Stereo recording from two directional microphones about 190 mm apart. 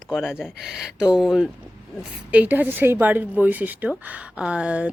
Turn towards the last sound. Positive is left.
turn(degrees=-5)  # may be behind; listen again after turning